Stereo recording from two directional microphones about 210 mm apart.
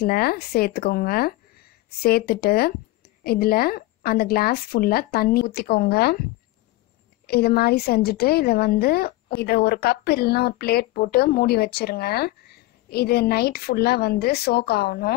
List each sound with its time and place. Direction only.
0.0 s a woman's voice: 45° left (ahead or behind)
7.2 s a woman's voice: 50° left (ahead or behind)